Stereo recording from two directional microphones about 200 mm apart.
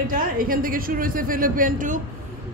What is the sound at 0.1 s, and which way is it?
A woman's voice, 45° right (ahead or behind).